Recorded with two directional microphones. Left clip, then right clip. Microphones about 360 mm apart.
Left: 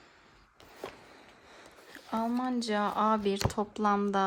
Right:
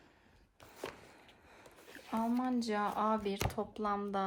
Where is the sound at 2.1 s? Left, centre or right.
Left.